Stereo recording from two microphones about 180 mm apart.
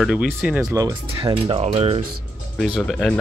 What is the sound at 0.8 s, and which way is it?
Speech, 20° right (ahead or behind).